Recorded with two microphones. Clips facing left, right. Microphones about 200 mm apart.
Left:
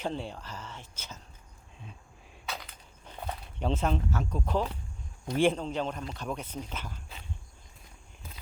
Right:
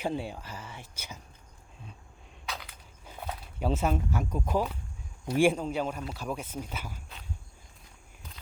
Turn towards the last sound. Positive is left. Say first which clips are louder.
# right 1 dB
turn(degrees=-10)  # may be behind; listen again after turning